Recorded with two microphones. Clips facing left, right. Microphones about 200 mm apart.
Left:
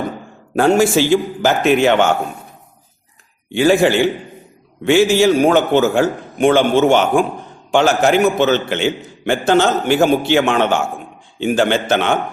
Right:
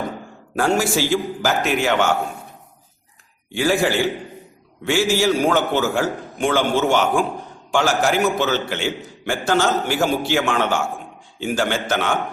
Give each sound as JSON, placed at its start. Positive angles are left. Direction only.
{"t": 0.5, "sound": "a man's voice", "side_deg": 25}
{"t": 3.5, "sound": "a man's voice", "side_deg": 25}
{"t": 4.9, "sound": "a man's voice", "side_deg": 20}